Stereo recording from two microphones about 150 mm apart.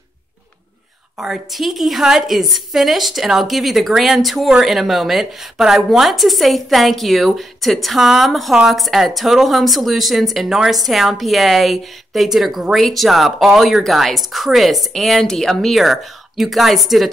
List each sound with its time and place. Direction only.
1.1 s a woman's voice: centre (ahead or behind)